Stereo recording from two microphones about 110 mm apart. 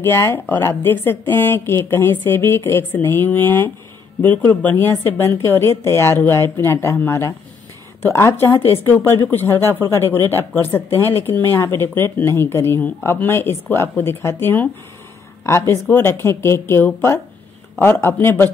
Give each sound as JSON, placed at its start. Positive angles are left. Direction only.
{"t": 0.0, "sound": "speech", "side_deg": 25}